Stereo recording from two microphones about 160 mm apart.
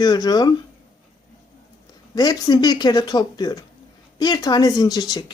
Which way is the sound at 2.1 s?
25° left (ahead or behind).